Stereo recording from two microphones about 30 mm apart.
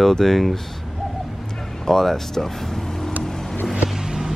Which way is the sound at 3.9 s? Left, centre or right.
Centre.